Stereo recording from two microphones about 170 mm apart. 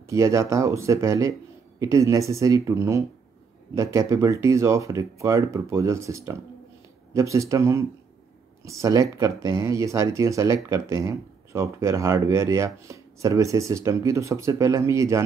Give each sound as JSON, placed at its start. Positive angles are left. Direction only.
{"t": 0.0, "sound": "speech", "side_deg": -15}